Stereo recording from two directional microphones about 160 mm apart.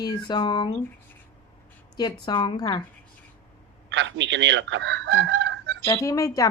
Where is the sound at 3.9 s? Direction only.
90° right.